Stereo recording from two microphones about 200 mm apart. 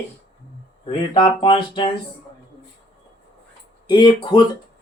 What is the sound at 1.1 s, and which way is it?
Speech, 25° left (ahead or behind).